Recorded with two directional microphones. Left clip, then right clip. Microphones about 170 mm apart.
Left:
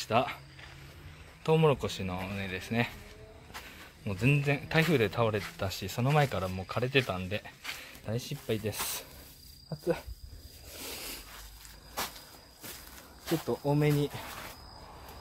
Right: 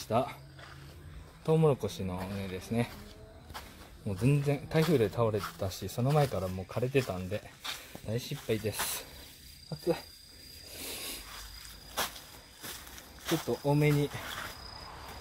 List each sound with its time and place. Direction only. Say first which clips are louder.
0.0 s speech: left 2 dB; 5° right (ahead or behind)
1.4 s speech: left 1 dB; 5° right (ahead or behind)
3.5 s a sound: left 1 dB; 5° right (ahead or behind)
4.9 s speech: even; 5° right (ahead or behind)
10.8 s a sound: even; centre (ahead or behind)
13.3 s speech: even; centre (ahead or behind)